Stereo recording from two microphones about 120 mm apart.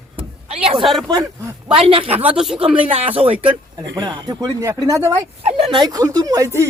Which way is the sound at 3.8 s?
35° right (ahead or behind).